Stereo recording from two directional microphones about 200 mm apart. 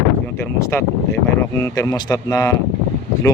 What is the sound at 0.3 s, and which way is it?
Speech, 10° left (ahead or behind).